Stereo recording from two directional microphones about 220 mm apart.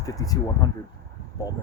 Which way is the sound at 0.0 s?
15° left (ahead or behind).